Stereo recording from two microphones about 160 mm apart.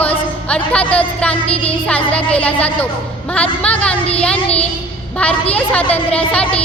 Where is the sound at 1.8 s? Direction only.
10° left (ahead or behind).